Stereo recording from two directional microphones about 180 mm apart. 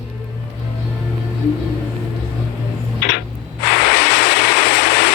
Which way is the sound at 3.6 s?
65° left (ahead or behind).